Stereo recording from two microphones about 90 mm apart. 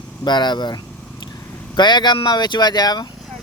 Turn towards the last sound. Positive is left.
turn(degrees=50)  # may be behind; listen again after turning